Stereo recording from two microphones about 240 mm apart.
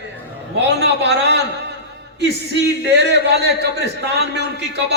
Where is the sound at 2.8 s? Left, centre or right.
Right.